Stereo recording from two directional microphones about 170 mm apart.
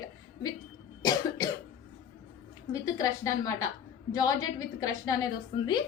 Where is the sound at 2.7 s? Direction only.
20° left (ahead or behind).